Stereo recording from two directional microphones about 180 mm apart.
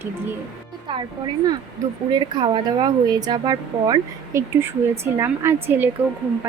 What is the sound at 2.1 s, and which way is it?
Speech, 25° right (ahead or behind).